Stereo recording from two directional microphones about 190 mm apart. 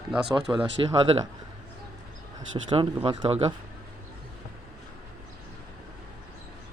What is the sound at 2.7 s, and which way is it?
Speech, 25° right (ahead or behind).